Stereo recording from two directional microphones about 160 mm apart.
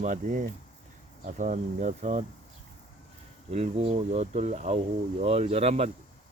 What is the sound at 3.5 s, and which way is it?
Speech, 40° right (ahead or behind).